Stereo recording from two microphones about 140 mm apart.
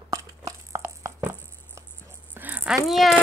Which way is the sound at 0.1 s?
25° right (ahead or behind).